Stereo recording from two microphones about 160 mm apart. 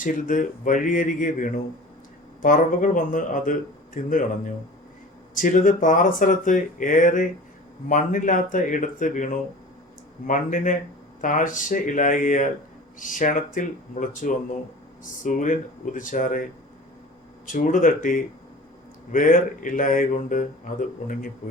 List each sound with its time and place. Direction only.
0.0 s speech: 55° left (ahead or behind)
5.4 s speech: 55° left (ahead or behind)